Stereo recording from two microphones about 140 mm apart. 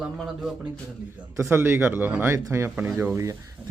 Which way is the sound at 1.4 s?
15° right (ahead or behind).